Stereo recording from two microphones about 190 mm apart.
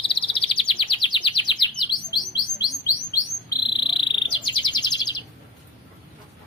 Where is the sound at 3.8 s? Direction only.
25° left (ahead or behind).